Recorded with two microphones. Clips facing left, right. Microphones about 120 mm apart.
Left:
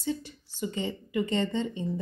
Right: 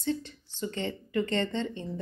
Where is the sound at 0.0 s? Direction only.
10° left (ahead or behind).